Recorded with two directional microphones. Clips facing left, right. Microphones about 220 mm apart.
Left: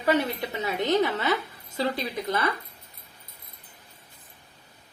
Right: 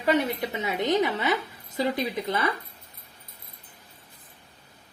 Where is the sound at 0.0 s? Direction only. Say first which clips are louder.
Even; 15° right (ahead or behind).